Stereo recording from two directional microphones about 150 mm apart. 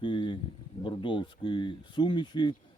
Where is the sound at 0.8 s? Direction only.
35° left (ahead or behind).